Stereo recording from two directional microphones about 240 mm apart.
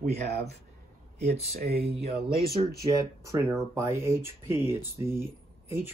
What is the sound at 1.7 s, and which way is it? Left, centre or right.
Speech, right.